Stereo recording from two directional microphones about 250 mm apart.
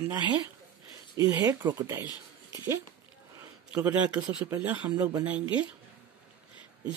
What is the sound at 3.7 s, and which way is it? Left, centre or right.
Speech, centre.